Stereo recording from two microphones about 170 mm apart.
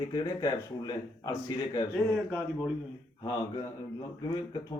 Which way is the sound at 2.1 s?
Centre (ahead or behind).